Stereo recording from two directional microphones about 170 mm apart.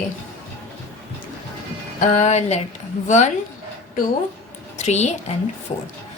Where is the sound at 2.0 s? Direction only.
45° left (ahead or behind).